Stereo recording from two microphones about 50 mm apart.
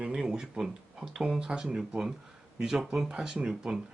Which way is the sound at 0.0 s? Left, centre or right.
Centre.